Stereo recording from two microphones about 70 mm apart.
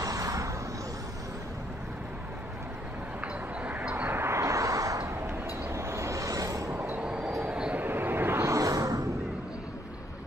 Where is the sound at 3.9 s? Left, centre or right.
Right.